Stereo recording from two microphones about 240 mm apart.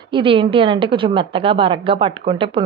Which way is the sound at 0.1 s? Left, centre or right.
Right.